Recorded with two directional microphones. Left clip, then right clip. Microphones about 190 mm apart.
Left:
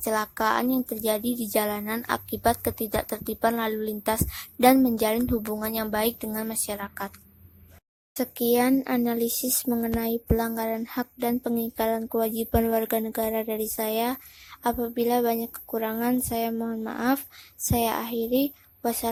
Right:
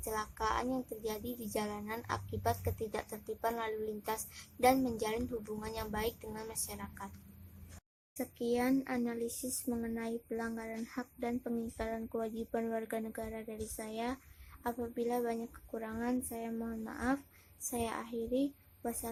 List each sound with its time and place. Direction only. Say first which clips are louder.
0.0 s speech: left 12 dB; 40° left (ahead or behind)
8.1 s speech: left 12 dB; 45° left (ahead or behind)